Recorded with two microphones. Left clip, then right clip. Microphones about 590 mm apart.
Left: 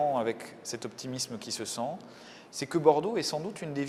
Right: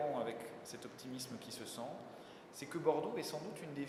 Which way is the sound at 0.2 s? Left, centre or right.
Left.